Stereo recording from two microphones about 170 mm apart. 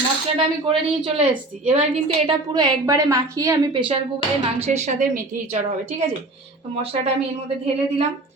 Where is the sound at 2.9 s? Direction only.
20° right (ahead or behind).